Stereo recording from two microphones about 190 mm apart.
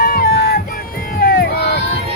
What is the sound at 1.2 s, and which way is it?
Crowd, 50° left (ahead or behind).